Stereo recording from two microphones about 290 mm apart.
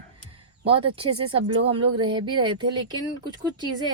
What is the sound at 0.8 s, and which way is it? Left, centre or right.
Speech, centre.